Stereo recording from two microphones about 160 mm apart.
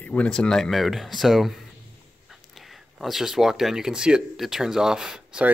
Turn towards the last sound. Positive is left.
turn(degrees=-5)  # may be behind; listen again after turning